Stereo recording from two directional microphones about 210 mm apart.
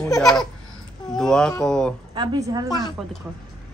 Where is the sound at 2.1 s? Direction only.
20° right (ahead or behind).